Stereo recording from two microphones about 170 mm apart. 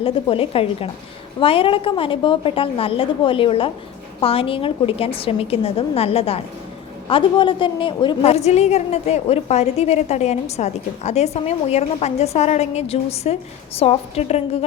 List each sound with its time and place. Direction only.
0.0 s a woman's voice: 30° left (ahead or behind)